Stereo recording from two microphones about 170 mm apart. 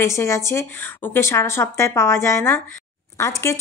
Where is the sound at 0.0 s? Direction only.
15° left (ahead or behind).